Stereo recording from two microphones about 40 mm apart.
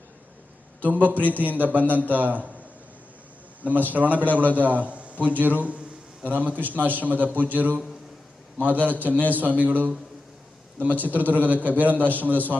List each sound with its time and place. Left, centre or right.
0.8 s a man's voice: right
3.6 s a man's voice: right
5.4 s a man's voice: right
8.9 s a man's voice: right